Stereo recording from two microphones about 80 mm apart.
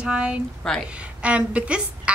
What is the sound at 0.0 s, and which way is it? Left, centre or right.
A woman's voice, centre.